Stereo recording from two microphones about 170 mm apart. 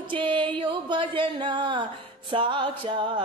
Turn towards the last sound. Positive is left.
turn(degrees=-30)  # may be behind; listen again after turning